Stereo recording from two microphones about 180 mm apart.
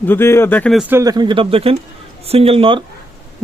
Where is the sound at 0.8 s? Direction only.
10° right (ahead or behind); by 2.8 s 30° right (ahead or behind).